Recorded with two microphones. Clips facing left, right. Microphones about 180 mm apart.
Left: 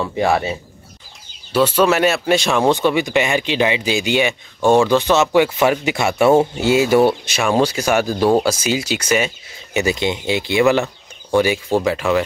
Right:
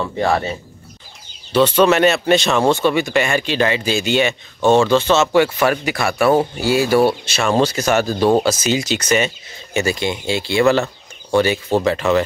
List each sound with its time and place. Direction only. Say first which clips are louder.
0.0 s speech: left 1 dB; 10° left (ahead or behind)
9.8 s speech: left 1 dB; 20° left (ahead or behind)